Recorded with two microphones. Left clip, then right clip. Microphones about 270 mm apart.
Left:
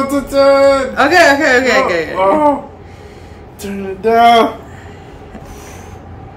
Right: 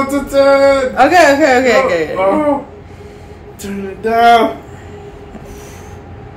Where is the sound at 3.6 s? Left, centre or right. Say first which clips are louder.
Left 3 dB; centre.